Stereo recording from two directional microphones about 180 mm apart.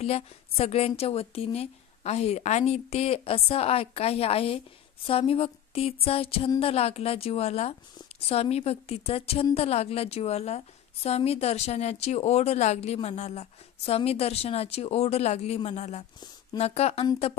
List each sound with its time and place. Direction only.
0.0 s a woman's voice: 35° left (ahead or behind)